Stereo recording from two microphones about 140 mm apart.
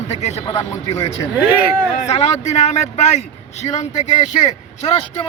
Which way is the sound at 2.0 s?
55° left (ahead or behind).